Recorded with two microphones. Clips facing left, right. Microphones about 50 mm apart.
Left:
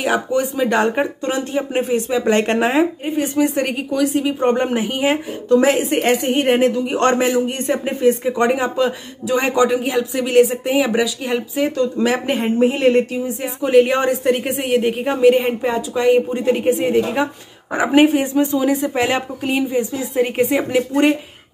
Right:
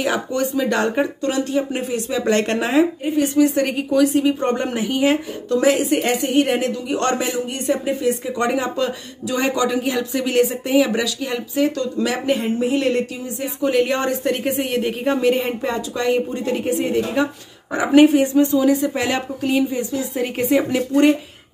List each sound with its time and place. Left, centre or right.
0.0 s speech: centre
3.6 s speech: centre
4.4 s speech: left